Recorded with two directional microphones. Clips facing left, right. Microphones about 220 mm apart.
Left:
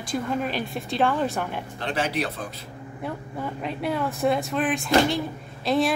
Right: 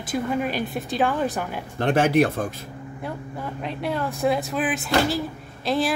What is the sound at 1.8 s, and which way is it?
Speech, 50° right (ahead or behind).